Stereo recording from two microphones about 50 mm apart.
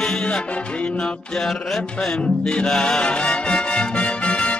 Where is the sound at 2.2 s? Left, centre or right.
Left.